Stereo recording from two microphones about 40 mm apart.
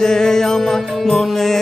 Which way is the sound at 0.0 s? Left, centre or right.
Centre.